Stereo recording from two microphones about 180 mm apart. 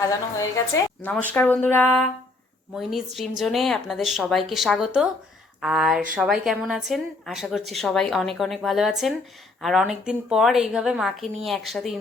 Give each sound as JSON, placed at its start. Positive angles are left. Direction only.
{"t": 0.1, "sound": "a woman's voice", "side_deg": 15}
{"t": 2.7, "sound": "a woman's voice", "side_deg": 0}